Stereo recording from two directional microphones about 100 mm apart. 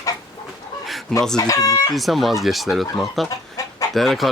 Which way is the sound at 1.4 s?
35° left (ahead or behind).